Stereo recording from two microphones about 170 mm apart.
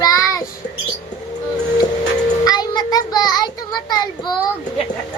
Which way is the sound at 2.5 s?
25° left (ahead or behind).